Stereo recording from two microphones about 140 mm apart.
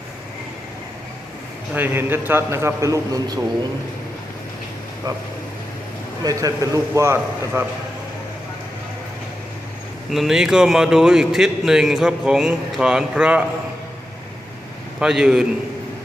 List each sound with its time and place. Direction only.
1.7 s a man's voice: 15° right (ahead or behind)
6.2 s a man's voice: 25° right (ahead or behind)
10.1 s a man's voice: centre (ahead or behind)
14.9 s a man's voice: 5° right (ahead or behind)